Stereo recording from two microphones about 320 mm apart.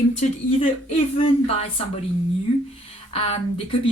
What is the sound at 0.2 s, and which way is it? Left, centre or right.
Speech, left.